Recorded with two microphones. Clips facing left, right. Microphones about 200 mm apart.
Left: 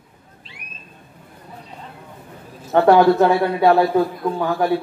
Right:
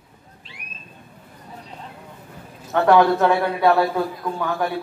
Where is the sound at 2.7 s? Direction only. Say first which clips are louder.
Left 3 dB; 30° left (ahead or behind).